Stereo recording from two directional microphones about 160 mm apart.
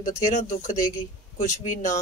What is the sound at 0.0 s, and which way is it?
Speech, 50° left (ahead or behind).